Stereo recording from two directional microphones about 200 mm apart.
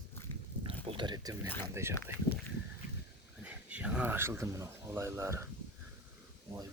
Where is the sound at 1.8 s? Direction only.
15° right (ahead or behind).